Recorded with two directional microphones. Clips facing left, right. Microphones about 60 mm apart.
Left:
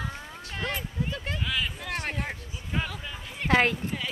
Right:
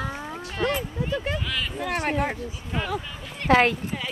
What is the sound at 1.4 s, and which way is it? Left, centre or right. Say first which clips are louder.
Speech: right 1 dB; centre.